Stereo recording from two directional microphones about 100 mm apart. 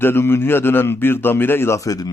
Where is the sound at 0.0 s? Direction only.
25° left (ahead or behind).